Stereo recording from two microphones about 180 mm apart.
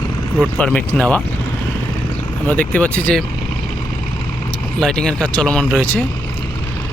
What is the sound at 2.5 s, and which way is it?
Speech, 5° left (ahead or behind).